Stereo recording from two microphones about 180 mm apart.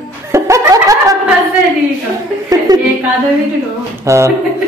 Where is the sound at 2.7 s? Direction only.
20° right (ahead or behind).